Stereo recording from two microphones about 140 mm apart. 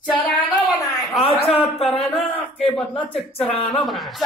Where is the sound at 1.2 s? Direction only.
40° left (ahead or behind).